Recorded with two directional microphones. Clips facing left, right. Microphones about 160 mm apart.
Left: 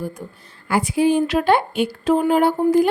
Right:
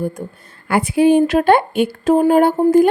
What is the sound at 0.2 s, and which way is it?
A woman's voice, 50° right (ahead or behind).